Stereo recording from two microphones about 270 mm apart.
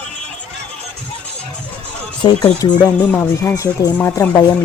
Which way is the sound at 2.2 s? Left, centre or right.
Centre.